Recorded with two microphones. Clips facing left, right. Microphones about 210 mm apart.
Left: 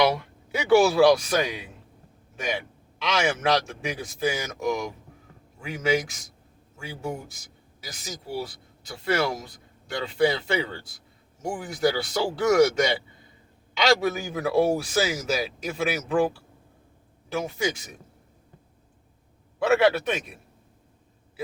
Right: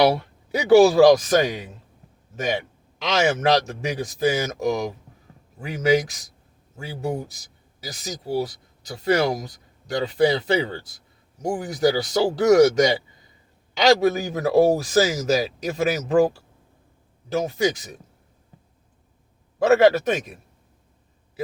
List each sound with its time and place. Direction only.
0.0 s a man's voice: 40° right (ahead or behind)
7.8 s a man's voice: 40° right (ahead or behind)
17.3 s a man's voice: 40° right (ahead or behind)
19.6 s a man's voice: 40° right (ahead or behind)